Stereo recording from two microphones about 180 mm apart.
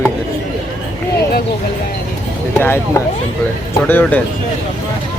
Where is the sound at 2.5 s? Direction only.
15° left (ahead or behind).